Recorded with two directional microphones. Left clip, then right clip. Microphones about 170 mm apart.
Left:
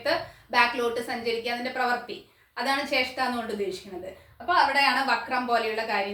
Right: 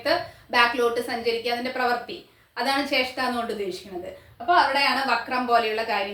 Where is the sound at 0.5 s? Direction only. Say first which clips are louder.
Right 2 dB; 10° right (ahead or behind).